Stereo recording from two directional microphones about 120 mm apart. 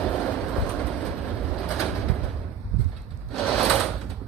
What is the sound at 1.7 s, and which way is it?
Bird, centre (ahead or behind).